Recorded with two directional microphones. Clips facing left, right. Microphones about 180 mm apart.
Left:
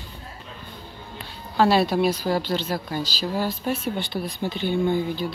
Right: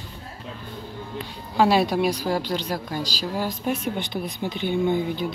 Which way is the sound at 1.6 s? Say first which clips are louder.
Even; 15° right (ahead or behind).